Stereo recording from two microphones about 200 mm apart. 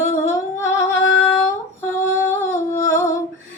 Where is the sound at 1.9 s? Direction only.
10° left (ahead or behind).